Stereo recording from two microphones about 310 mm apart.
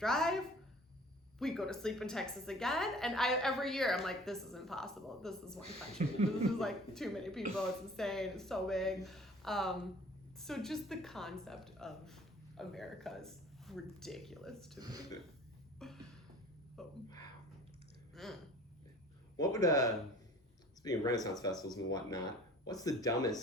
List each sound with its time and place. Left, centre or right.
0.0 s a woman's voice: centre
6.0 s speech: right
6.6 s a woman's voice: centre
14.8 s speech: centre
15.8 s a sound: centre
18.1 s a sound: centre
19.4 s speech: centre